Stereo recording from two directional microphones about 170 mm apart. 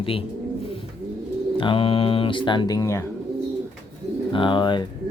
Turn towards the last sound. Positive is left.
turn(degrees=25)  # may be behind; listen again after turning